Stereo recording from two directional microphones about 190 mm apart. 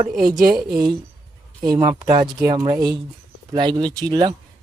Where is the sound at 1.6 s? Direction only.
20° right (ahead or behind).